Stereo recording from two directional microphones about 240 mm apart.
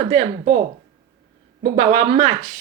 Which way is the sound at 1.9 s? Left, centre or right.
Right.